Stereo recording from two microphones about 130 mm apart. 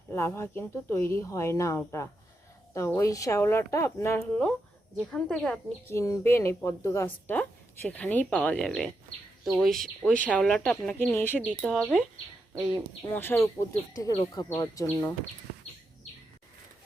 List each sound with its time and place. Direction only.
0.1 s speech: 20° left (ahead or behind)
4.2 s a woman's voice: 10° left (ahead or behind)
5.9 s a woman's voice: 25° left (ahead or behind)
11.3 s speech: 5° left (ahead or behind)
13.1 s a woman's voice: 15° left (ahead or behind)
13.9 s speech: 30° left (ahead or behind)